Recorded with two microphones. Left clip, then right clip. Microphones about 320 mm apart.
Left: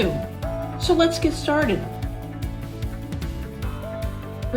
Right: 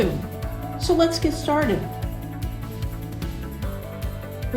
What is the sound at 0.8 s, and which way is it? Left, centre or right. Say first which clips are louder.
Speech: left 1 dB; centre.